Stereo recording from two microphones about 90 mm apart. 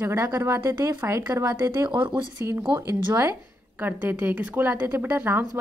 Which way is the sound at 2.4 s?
30° right (ahead or behind).